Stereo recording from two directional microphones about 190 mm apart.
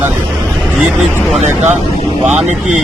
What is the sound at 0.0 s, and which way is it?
Vehicle, centre (ahead or behind).